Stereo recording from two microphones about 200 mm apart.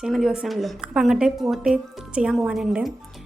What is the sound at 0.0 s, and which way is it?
A woman's voice, centre (ahead or behind).